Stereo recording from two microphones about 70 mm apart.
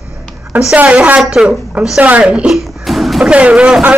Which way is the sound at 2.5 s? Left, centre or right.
Centre.